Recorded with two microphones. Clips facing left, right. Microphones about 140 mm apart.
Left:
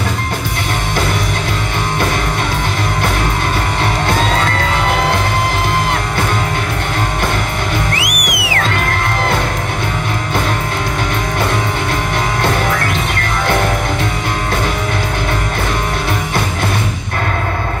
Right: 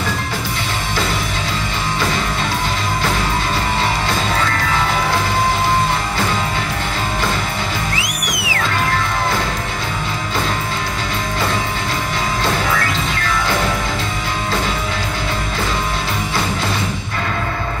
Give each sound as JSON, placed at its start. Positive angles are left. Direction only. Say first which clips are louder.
{"t": 7.9, "sound": "music", "louder": "left 4 dB", "side_deg": 65}